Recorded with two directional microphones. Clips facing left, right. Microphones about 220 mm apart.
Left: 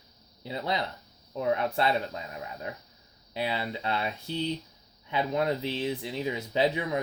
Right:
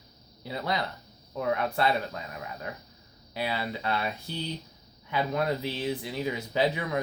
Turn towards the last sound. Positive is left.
turn(degrees=20)  # may be behind; listen again after turning